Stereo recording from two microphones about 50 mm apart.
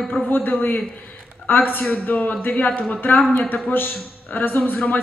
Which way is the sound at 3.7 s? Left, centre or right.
Left.